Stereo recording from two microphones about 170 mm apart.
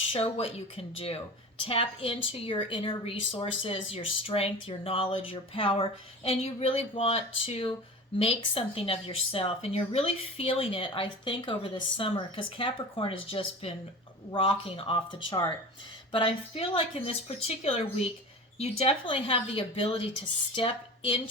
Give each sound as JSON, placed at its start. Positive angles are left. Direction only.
{"t": 0.1, "sound": "speech", "side_deg": 35}